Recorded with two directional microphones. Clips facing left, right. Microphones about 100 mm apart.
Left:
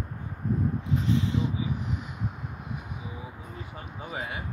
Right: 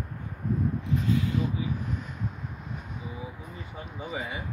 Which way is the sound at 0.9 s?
25° left (ahead or behind).